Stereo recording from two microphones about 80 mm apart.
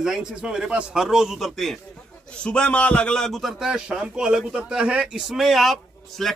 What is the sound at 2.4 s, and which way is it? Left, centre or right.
A man's voice, centre.